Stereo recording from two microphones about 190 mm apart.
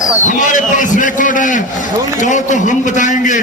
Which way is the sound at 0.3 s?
40° left (ahead or behind).